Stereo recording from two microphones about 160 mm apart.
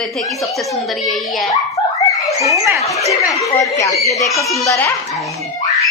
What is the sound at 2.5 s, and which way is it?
Speech, 20° right (ahead or behind).